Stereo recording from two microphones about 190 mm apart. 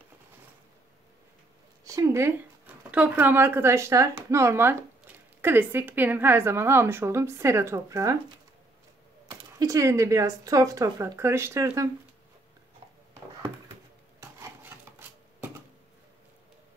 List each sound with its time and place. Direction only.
1.9 s speech: 15° right (ahead or behind)
9.3 s speech: 20° right (ahead or behind)
14.2 s rub: 10° right (ahead or behind)